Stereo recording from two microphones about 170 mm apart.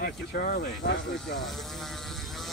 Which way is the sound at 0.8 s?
85° left.